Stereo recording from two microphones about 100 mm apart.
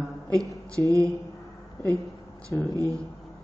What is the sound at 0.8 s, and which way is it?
Speech, 30° right (ahead or behind).